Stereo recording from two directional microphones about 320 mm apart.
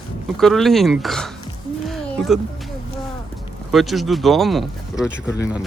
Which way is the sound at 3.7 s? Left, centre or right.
Centre.